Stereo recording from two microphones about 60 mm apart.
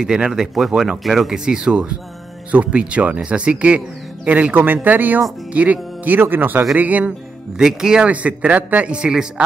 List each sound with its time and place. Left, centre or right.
0.0 s speech: centre
7.1 s speech: centre
8.1 s speech: right